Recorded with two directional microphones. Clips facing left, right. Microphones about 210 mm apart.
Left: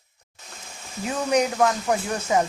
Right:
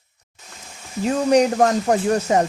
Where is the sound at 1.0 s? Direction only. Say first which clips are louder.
Right 6 dB; 35° right (ahead or behind).